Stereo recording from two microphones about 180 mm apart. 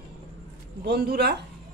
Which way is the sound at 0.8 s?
60° right (ahead or behind).